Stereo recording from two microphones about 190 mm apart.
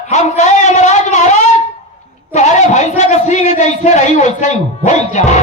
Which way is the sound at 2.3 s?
40° left (ahead or behind).